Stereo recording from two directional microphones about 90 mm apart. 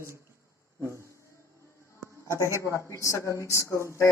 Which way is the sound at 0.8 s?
30° right (ahead or behind).